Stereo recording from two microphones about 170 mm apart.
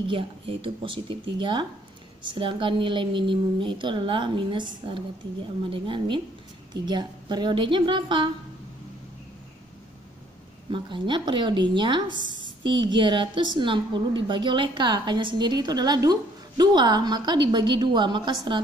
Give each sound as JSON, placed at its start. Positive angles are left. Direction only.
{"t": 0.1, "sound": "a woman's voice", "side_deg": -30}
{"t": 10.7, "sound": "a woman's voice", "side_deg": -30}
{"t": 12.2, "sound": "a woman's voice", "side_deg": -90}
{"t": 12.6, "sound": "a woman's voice", "side_deg": -25}